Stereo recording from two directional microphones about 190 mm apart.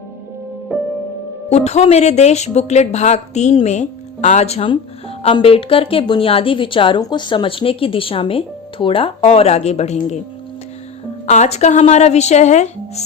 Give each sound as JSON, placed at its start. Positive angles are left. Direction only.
{"t": 1.5, "sound": "speech", "side_deg": 35}
{"t": 11.3, "sound": "speech", "side_deg": 35}